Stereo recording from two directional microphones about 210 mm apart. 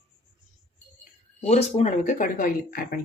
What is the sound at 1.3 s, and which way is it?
Speech, 30° left (ahead or behind).